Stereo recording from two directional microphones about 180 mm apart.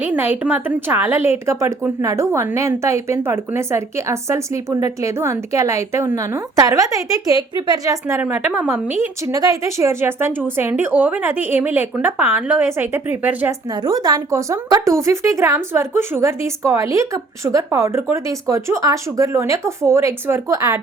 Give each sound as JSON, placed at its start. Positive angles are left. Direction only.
{"t": 0.0, "sound": "speech", "side_deg": -10}
{"t": 8.0, "sound": "speech", "side_deg": -10}
{"t": 13.8, "sound": "speech", "side_deg": -20}